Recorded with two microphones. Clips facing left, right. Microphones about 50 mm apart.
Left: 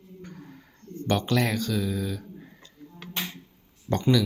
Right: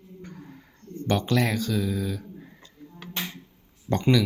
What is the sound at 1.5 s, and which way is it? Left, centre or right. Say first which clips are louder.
Speech: right 1 dB; centre.